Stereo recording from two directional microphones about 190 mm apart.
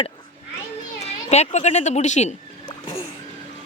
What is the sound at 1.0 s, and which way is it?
A child's voice, 35° left (ahead or behind).